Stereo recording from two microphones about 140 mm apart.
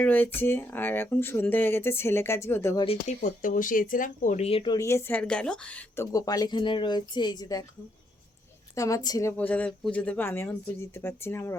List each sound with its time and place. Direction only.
0.0 s speech: 15° left (ahead or behind)
2.7 s speech: 45° left (ahead or behind)
3.2 s speech: 80° left
4.4 s speech: 45° left (ahead or behind)
4.7 s speech: 20° left (ahead or behind)
6.1 s speech: 25° left (ahead or behind)
8.7 s a woman's voice: 25° left (ahead or behind)
9.4 s speech: 10° left (ahead or behind)